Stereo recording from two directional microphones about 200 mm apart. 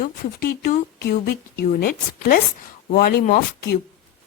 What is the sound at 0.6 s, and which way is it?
A woman's voice, 50° left (ahead or behind).